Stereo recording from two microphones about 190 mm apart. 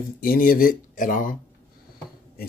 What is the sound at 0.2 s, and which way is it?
Speech, 50° left (ahead or behind).